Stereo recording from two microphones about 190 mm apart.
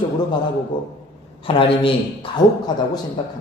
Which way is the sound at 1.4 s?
30° left (ahead or behind).